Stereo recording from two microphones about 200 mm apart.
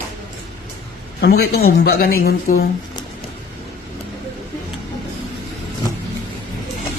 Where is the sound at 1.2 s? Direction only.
55° left (ahead or behind).